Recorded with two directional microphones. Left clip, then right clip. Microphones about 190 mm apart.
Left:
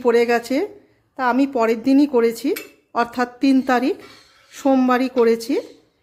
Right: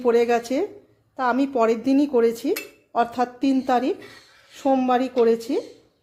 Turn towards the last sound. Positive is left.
turn(degrees=20)  # may be behind; listen again after turning